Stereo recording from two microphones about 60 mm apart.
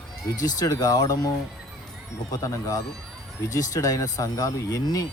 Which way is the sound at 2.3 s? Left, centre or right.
Left.